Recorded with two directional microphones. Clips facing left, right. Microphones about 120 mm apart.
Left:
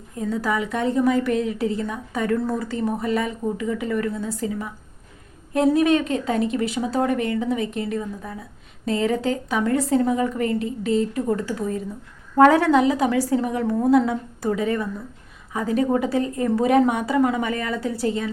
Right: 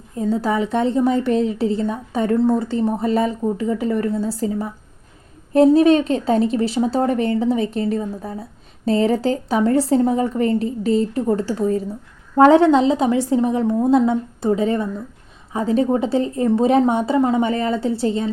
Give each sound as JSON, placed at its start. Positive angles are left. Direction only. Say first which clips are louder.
{"t": 0.2, "sound": "a woman's voice", "louder": "right 4 dB", "side_deg": -30}